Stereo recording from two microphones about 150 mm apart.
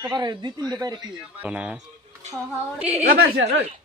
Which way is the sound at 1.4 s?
10° right (ahead or behind).